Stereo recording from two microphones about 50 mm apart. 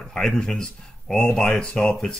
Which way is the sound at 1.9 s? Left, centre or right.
Centre.